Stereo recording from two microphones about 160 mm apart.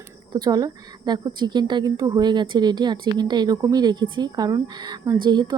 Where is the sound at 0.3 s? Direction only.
25° right (ahead or behind).